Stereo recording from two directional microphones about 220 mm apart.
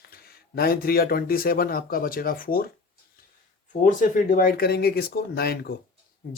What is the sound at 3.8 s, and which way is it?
Speech, 35° left (ahead or behind).